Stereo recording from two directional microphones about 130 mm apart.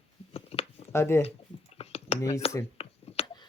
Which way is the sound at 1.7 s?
50° left (ahead or behind).